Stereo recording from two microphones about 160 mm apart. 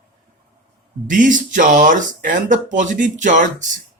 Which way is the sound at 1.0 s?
55° right (ahead or behind).